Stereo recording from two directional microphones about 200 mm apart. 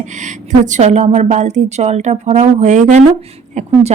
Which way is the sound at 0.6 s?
35° right (ahead or behind).